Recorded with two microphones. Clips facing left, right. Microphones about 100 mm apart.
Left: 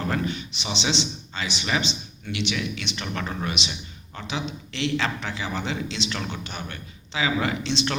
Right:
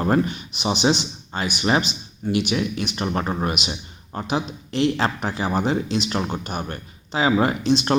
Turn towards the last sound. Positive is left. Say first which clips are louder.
# right 6 dB
turn(degrees=-45)  # may be behind; listen again after turning